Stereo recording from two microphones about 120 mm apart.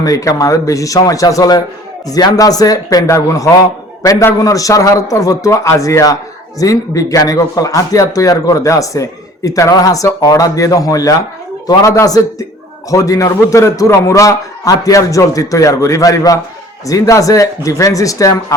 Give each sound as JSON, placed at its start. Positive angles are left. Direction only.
{"t": 0.0, "sound": "a man's voice", "side_deg": 30}